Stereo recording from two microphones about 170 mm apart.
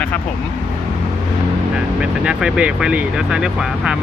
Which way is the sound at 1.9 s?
5° right (ahead or behind).